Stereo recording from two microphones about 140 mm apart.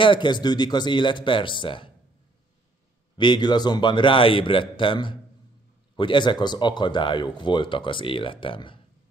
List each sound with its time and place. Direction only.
0.0 s speech: 35° left (ahead or behind)
3.2 s speech: 30° left (ahead or behind)